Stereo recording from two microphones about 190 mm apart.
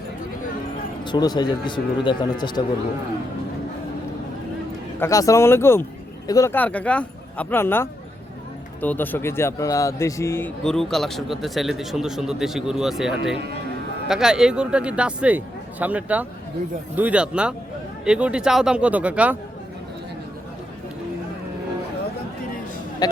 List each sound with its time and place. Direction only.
1.0 s speech: 20° left (ahead or behind)
4.9 s speech: 15° left (ahead or behind); by 19.4 s 5° right (ahead or behind)